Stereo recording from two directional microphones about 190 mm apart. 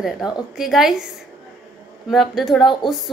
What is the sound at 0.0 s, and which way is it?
A woman's voice, centre (ahead or behind).